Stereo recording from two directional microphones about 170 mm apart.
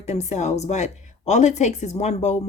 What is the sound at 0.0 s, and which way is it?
A woman's voice, 40° left (ahead or behind).